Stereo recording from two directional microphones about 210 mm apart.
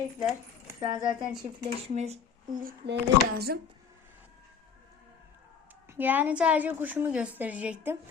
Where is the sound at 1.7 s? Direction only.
30° right (ahead or behind); by 3.5 s 50° right (ahead or behind).